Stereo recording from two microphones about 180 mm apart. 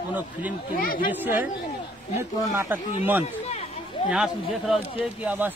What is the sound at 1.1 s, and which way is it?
Speech, 10° right (ahead or behind).